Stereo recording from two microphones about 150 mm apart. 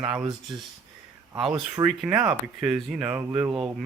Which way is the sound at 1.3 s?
5° right (ahead or behind).